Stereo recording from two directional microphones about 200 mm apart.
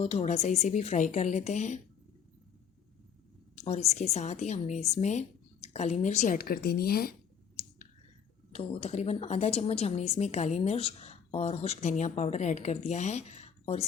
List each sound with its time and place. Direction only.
0.0 s speech: 35° left (ahead or behind)
3.5 s speech: 35° left (ahead or behind); by 7.1 s 50° left (ahead or behind)
8.5 s speech: 35° left (ahead or behind)